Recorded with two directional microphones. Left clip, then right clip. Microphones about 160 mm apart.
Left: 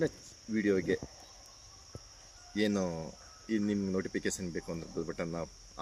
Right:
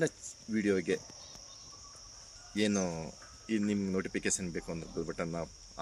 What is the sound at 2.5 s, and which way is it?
Speech, 10° right (ahead or behind).